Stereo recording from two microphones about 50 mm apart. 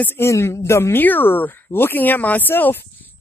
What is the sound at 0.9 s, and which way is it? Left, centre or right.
Speech, left.